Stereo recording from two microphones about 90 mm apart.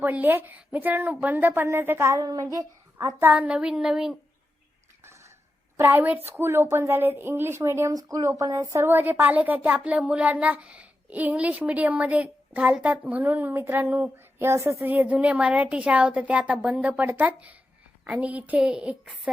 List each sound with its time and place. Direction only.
0.0 s a woman's voice: 20° right (ahead or behind)
2.1 s speech: 40° right (ahead or behind)
3.2 s a woman's voice: 20° right (ahead or behind)
5.0 s a sound: 35° right (ahead or behind)
5.7 s a woman's voice: 25° right (ahead or behind)
7.9 s a woman's voice: 40° right (ahead or behind); by 14.4 s 20° right (ahead or behind)
14.4 s speech: 30° right (ahead or behind)
14.8 s a woman's voice: 20° right (ahead or behind)